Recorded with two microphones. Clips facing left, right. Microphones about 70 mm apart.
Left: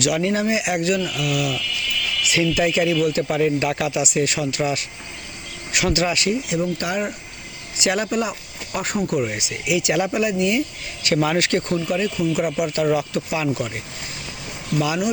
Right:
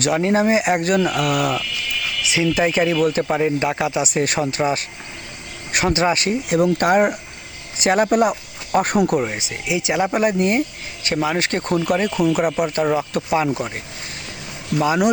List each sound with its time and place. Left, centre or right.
0.0 s speech: right
2.2 s speech: right
3.2 s speech: right
6.5 s speech: right
7.8 s speech: right
9.2 s speech: right
10.1 s speech: right
11.1 s speech: centre
11.3 s speech: right
11.9 s speech: right